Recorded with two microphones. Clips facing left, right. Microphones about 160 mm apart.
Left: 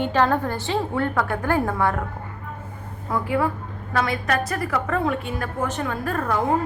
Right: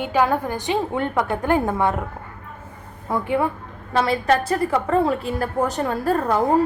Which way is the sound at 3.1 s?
25° right (ahead or behind).